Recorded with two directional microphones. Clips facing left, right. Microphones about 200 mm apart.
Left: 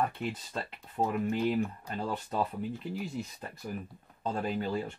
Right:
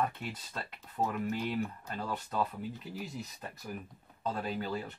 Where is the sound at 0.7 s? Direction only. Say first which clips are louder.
Left 2 dB; 30° left (ahead or behind).